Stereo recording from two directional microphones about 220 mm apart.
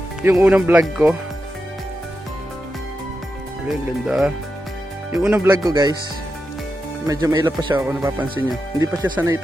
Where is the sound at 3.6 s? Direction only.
5° right (ahead or behind).